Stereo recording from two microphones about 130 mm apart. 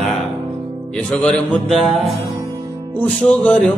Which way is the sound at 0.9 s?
10° left (ahead or behind).